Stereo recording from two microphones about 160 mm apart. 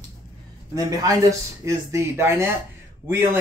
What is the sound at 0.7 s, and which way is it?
Speech, 20° right (ahead or behind).